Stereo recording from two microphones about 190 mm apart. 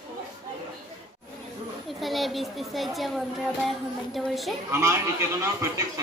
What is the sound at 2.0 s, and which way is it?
Speech, centre (ahead or behind).